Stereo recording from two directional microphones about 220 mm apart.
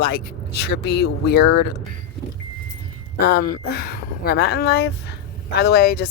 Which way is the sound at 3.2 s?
45° left (ahead or behind).